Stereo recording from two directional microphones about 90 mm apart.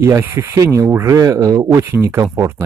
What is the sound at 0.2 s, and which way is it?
Speech, 25° right (ahead or behind).